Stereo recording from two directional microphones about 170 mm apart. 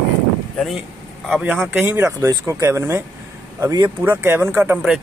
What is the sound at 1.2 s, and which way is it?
Speech, 5° right (ahead or behind).